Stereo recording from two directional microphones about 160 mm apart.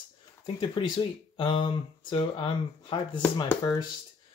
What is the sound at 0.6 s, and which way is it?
Speech, 30° left (ahead or behind).